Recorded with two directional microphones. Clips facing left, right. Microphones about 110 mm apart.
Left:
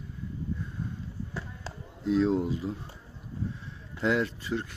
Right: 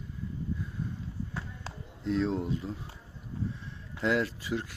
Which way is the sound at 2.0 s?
5° left (ahead or behind).